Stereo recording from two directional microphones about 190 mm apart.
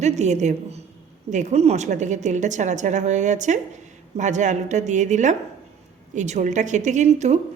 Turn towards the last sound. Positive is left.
turn(degrees=-35)  # may be behind; listen again after turning